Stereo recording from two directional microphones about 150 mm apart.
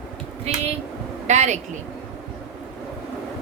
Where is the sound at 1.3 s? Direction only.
50° right (ahead or behind).